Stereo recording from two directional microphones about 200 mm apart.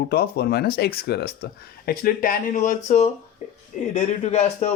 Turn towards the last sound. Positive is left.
turn(degrees=35)  # may be behind; listen again after turning